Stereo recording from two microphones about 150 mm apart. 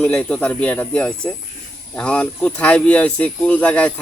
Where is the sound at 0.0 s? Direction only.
5° left (ahead or behind).